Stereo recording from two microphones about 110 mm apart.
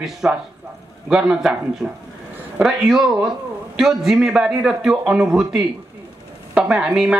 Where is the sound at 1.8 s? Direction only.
15° right (ahead or behind).